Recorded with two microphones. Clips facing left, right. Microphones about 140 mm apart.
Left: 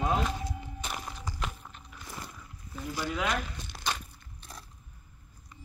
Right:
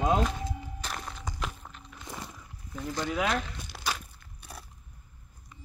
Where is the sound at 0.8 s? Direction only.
5° left (ahead or behind).